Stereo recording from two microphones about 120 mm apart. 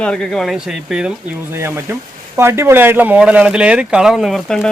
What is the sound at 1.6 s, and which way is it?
Speech, 20° right (ahead or behind).